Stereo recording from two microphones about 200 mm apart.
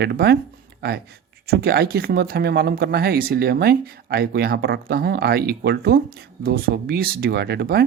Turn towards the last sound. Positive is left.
turn(degrees=-55)  # may be behind; listen again after turning